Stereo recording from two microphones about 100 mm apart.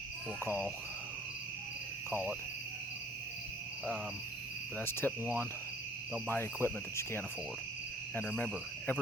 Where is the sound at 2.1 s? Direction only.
20° right (ahead or behind).